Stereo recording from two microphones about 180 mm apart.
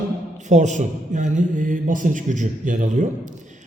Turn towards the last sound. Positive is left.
turn(degrees=-45)  # may be behind; listen again after turning